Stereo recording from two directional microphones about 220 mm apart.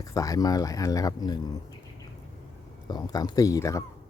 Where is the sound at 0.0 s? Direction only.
15° left (ahead or behind).